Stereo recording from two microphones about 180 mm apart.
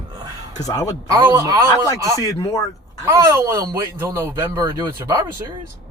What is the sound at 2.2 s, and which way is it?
Speech, 20° left (ahead or behind).